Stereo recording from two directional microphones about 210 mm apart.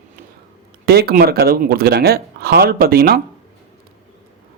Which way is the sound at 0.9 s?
45° right (ahead or behind).